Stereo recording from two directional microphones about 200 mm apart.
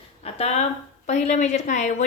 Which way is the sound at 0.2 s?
30° left (ahead or behind).